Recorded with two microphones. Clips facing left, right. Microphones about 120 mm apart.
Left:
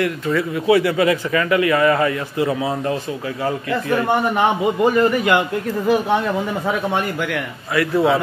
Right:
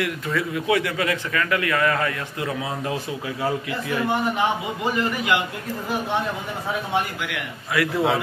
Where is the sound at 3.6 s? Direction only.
65° left (ahead or behind).